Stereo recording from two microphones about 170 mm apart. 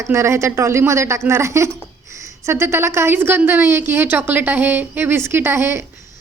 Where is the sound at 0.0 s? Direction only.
15° right (ahead or behind).